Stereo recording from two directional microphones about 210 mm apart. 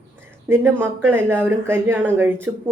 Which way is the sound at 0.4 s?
10° right (ahead or behind).